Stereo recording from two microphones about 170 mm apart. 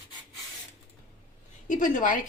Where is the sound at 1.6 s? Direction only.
50° left (ahead or behind).